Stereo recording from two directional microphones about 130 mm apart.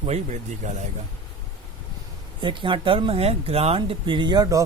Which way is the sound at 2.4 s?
40° right (ahead or behind).